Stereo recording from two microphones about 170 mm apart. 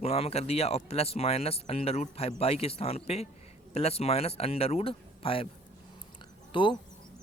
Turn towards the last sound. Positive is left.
turn(degrees=30)  # may be behind; listen again after turning